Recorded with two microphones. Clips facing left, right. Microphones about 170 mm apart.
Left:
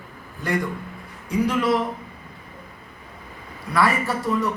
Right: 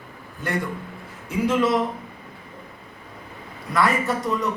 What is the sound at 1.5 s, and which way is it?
Speech, centre (ahead or behind).